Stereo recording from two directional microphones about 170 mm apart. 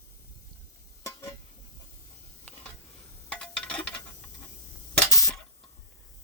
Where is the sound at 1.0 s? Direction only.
15° left (ahead or behind).